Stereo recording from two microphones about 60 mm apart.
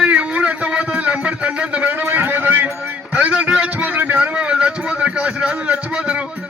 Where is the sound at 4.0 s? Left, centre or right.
Right.